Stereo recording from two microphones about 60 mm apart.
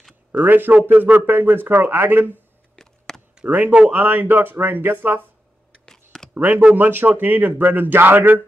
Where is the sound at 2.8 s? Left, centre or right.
Centre.